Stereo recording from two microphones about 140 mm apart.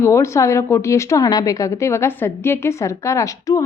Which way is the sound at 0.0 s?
20° left (ahead or behind).